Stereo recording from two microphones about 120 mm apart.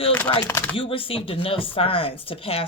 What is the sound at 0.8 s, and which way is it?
Speech, 50° left (ahead or behind).